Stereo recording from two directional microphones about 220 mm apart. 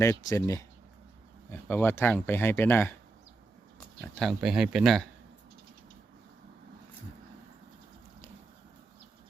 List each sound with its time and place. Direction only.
0.0 s speech: 10° left (ahead or behind)
4.4 s speech: 5° right (ahead or behind)